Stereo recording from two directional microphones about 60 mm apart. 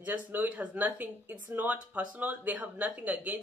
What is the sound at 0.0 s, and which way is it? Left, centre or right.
Speech, right.